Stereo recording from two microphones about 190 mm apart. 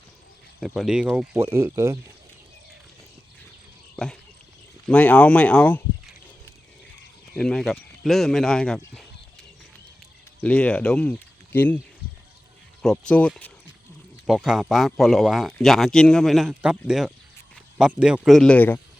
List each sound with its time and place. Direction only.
0.6 s speech: centre (ahead or behind)
3.9 s a sound: 5° left (ahead or behind)
4.9 s speech: 5° left (ahead or behind)
7.3 s speech: 5° left (ahead or behind)
10.4 s speech: 5° left (ahead or behind)
12.8 s speech: 5° left (ahead or behind)